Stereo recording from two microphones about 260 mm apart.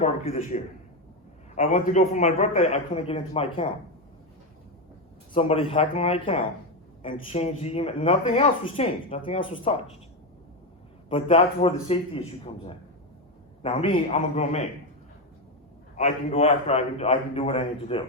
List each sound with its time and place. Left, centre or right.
0.0 s speech: left
5.3 s speech: left
11.1 s speech: left
13.6 s speech: centre
16.0 s speech: left